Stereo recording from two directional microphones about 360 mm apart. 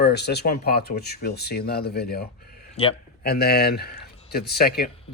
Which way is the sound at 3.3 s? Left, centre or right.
Left.